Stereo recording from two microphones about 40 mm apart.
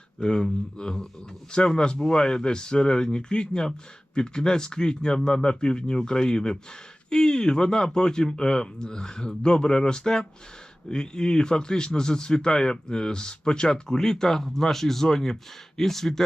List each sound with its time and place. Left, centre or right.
0.2 s speech: centre